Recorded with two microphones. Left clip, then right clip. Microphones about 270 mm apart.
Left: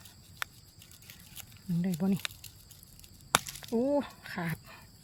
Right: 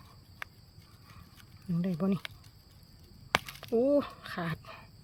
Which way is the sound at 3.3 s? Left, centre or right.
Centre.